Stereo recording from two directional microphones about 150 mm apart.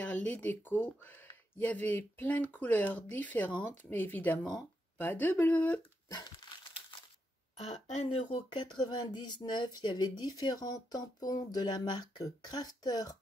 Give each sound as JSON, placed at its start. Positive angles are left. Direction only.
{"t": 0.0, "sound": "speech", "side_deg": 10}
{"t": 7.5, "sound": "speech", "side_deg": 40}
{"t": 8.4, "sound": "speech", "side_deg": 30}